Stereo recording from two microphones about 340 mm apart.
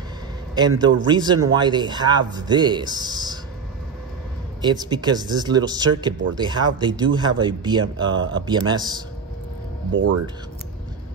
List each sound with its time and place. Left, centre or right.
0.6 s a man's voice: centre
4.6 s a man's voice: centre
9.9 s speech: right